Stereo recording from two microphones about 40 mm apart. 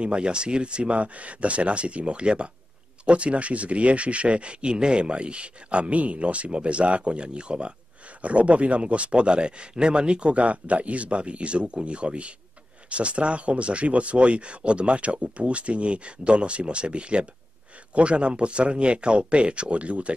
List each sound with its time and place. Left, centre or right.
0.0 s speech: right